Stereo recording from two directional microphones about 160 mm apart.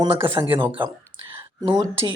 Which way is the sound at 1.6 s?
25° right (ahead or behind).